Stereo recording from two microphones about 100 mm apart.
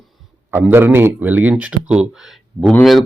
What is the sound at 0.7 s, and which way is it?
Speech, 20° right (ahead or behind).